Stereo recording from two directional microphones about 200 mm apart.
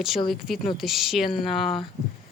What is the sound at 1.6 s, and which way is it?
Speech, 25° left (ahead or behind).